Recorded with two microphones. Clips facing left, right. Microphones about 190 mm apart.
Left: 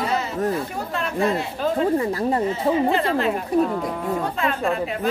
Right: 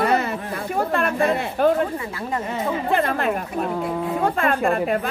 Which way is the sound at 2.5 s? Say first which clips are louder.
Left 3 dB; 55° right (ahead or behind).